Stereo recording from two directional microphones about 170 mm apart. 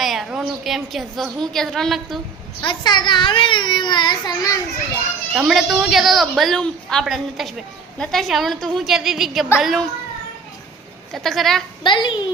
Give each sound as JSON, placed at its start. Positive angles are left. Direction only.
{"t": 0.0, "sound": "a woman's voice", "side_deg": 0}
{"t": 2.6, "sound": "a child's voice", "side_deg": 25}
{"t": 5.3, "sound": "a woman's voice", "side_deg": -5}
{"t": 11.1, "sound": "a woman's voice", "side_deg": 0}
{"t": 11.8, "sound": "a child's voice", "side_deg": 25}